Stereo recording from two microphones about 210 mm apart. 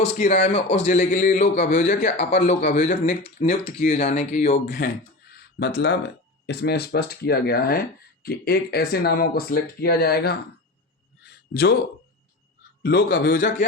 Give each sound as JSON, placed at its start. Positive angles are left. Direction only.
{"t": 0.0, "sound": "a man's voice", "side_deg": 35}
{"t": 11.2, "sound": "a sound", "side_deg": 50}
{"t": 12.8, "sound": "speech", "side_deg": 50}